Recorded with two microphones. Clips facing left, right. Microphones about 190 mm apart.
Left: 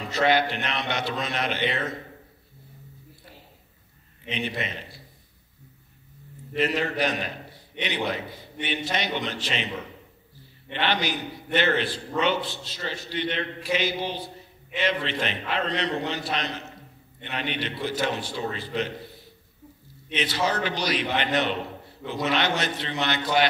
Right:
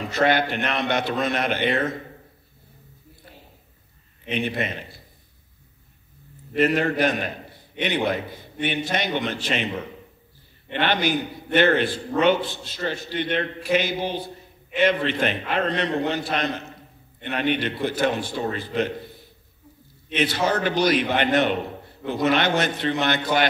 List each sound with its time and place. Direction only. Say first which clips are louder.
0.1 s a man's voice: right 1 dB; 50° right (ahead or behind)
4.3 s a man's voice: right 5 dB; 50° right (ahead or behind)
6.5 s a man's voice: right 5 dB; 50° right (ahead or behind)
10.7 s a man's voice: right 4 dB; 50° right (ahead or behind)
20.2 s a man's voice: right 4 dB; 50° right (ahead or behind)